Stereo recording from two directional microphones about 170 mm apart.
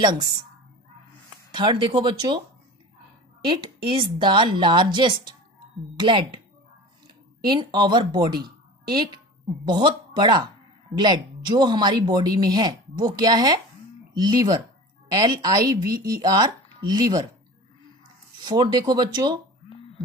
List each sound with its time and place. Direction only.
1.5 s speech: 25° right (ahead or behind)
3.4 s speech: 30° right (ahead or behind)
7.4 s a woman's voice: 25° right (ahead or behind)
18.4 s speech: 25° right (ahead or behind)